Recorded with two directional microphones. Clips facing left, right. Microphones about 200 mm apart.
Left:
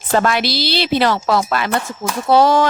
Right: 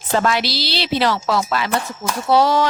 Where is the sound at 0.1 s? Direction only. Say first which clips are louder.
Left 2 dB; 50° left (ahead or behind).